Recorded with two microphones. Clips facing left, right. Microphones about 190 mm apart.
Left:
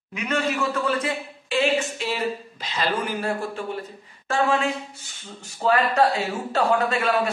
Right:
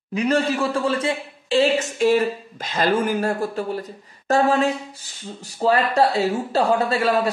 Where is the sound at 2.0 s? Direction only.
50° right (ahead or behind).